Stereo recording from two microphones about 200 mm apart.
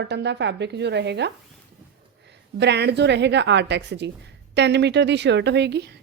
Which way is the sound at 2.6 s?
55° right (ahead or behind).